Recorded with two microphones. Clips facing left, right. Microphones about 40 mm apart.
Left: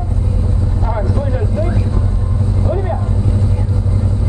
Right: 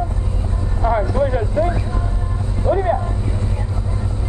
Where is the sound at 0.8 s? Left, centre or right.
Right.